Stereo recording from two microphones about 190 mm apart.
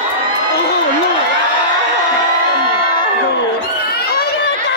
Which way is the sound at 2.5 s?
25° left (ahead or behind).